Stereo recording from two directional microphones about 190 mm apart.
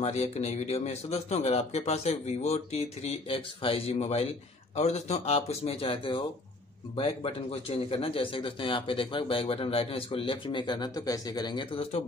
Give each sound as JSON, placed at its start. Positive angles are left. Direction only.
{"t": 0.0, "sound": "speech", "side_deg": 35}